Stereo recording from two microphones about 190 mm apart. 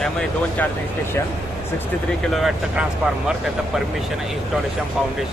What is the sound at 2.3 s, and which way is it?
Speech, centre (ahead or behind).